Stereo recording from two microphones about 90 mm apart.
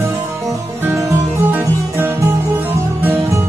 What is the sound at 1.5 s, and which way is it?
Music, 25° right (ahead or behind).